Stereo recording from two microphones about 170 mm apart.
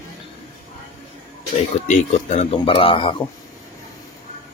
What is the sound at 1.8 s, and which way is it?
Speech, 40° left (ahead or behind).